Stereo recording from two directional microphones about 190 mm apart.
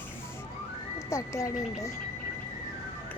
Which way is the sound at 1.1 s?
15° left (ahead or behind).